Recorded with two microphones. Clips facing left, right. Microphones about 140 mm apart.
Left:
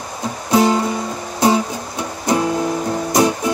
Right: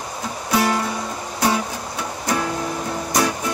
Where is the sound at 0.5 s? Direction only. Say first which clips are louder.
Left 5 dB; 25° left (ahead or behind).